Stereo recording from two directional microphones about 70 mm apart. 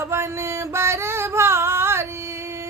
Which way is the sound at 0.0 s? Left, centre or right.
Right.